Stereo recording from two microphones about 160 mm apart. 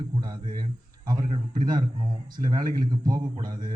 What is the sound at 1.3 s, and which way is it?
A man's voice, 50° right (ahead or behind).